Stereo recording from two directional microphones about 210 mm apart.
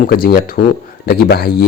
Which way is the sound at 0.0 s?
45° left (ahead or behind).